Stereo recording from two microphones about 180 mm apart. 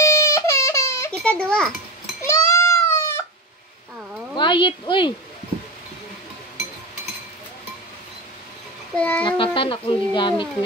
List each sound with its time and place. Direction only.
0.0 s baby cry: 15° left (ahead or behind)
1.1 s a sound: 5° left (ahead or behind)
2.2 s goat: 15° left (ahead or behind)
4.4 s speech: 25° left (ahead or behind)
8.9 s child singing: 5° left (ahead or behind)
9.4 s speech: 30° left (ahead or behind)